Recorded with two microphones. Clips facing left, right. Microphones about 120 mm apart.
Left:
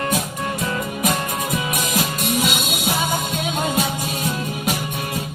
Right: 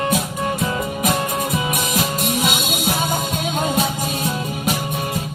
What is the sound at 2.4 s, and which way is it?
Music, 45° right (ahead or behind).